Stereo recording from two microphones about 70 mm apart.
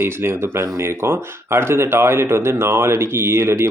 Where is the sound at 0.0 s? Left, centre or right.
Right.